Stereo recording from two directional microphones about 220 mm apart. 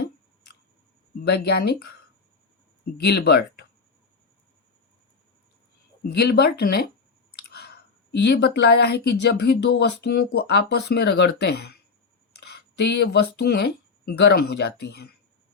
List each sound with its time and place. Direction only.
1.2 s speech: 45° left (ahead or behind)
3.0 s speech: 50° left (ahead or behind)
6.0 s speech: 45° left (ahead or behind)